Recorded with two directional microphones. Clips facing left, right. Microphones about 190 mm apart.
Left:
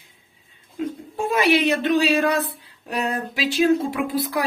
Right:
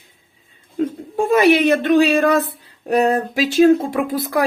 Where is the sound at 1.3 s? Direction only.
50° right (ahead or behind).